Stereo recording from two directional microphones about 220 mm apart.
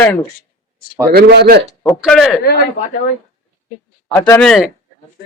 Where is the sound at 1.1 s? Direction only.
45° right (ahead or behind).